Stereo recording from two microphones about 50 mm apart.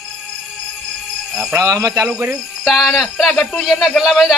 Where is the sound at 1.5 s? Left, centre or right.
Right.